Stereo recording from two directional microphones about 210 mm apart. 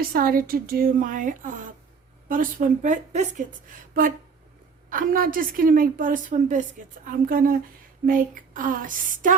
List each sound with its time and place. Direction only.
0.0 s a woman's voice: 45° right (ahead or behind)
4.9 s a woman's voice: 40° right (ahead or behind)